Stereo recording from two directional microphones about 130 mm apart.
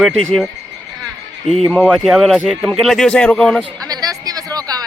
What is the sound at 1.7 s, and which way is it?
A man's voice, 10° left (ahead or behind).